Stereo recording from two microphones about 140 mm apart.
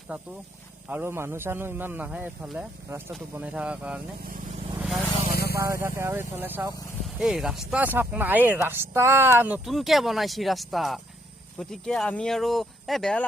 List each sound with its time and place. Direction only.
0.9 s speech: 15° right (ahead or behind)
4.8 s vehicle: centre (ahead or behind)
5.3 s vehicle: 90° left
5.5 s speech: 20° right (ahead or behind)
7.2 s speech: 5° right (ahead or behind); by 9.3 s 20° right (ahead or behind)
9.6 s speech: centre (ahead or behind)